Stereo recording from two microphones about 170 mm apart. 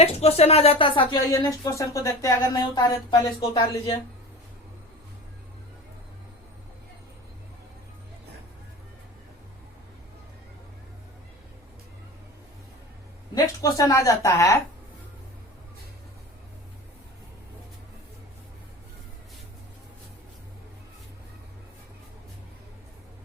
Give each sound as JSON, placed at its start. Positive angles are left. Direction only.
{"t": 0.0, "sound": "speech", "side_deg": 35}
{"t": 1.3, "sound": "speech", "side_deg": 20}
{"t": 13.3, "sound": "speech", "side_deg": 20}